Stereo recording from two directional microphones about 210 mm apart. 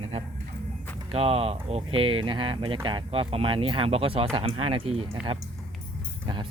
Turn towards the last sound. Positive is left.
turn(degrees=-20)  # may be behind; listen again after turning